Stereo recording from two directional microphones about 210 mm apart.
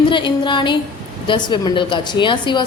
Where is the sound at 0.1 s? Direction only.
20° left (ahead or behind).